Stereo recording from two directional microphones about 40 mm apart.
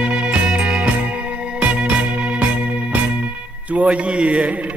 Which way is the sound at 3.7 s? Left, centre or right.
Right.